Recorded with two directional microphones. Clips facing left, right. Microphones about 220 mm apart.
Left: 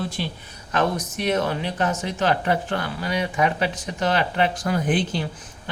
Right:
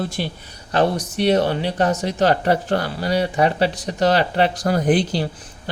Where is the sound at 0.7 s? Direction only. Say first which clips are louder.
Right 4 dB; 35° right (ahead or behind).